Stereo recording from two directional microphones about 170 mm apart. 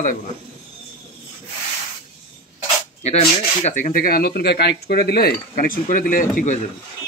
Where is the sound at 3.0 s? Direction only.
40° left (ahead or behind).